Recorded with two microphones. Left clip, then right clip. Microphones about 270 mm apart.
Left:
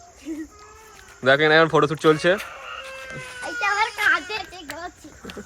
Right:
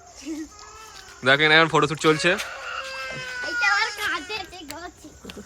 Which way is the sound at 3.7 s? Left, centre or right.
Centre.